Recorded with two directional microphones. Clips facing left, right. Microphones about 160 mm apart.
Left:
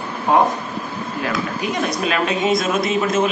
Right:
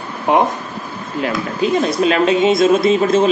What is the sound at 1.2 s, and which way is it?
A woman's voice, 25° right (ahead or behind).